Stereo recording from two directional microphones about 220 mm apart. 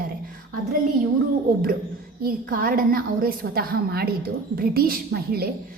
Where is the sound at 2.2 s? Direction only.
40° right (ahead or behind).